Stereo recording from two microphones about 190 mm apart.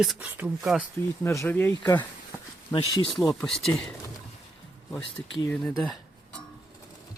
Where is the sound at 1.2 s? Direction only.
15° left (ahead or behind).